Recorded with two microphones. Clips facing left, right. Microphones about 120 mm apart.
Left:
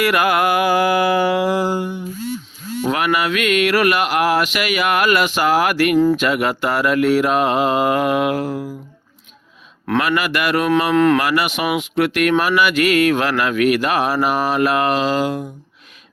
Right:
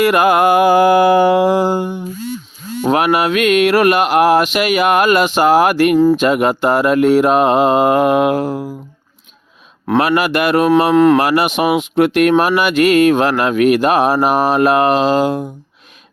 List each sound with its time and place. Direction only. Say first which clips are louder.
0.0 s music: right 5 dB; 30° right (ahead or behind)
2.9 s mantra: right 6 dB; 45° right (ahead or behind)
3.2 s speech: right 5 dB; 40° right (ahead or behind)
10.0 s speech: right 5 dB; 40° right (ahead or behind)
10.9 s speech: right 3 dB; 20° right (ahead or behind)
11.2 s speech: right 5 dB; 35° right (ahead or behind)